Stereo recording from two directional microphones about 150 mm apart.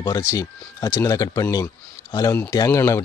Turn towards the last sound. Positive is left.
turn(degrees=20)  # may be behind; listen again after turning